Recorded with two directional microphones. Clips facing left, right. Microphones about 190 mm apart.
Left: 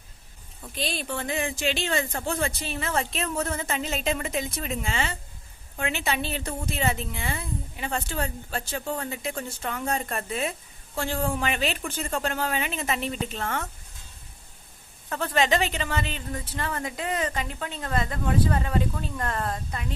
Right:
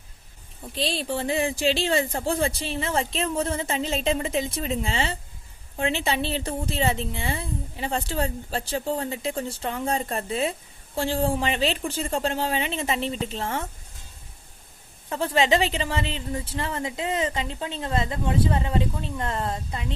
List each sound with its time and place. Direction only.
0.6 s a woman's voice: 30° right (ahead or behind)
15.1 s a woman's voice: 25° right (ahead or behind)